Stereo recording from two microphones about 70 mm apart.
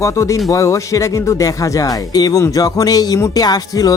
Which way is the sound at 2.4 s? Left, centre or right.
Left.